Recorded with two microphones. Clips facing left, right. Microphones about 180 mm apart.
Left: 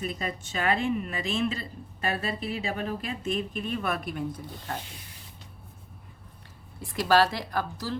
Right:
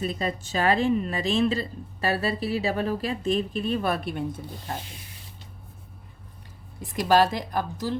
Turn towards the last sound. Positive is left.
turn(degrees=-20)  # may be behind; listen again after turning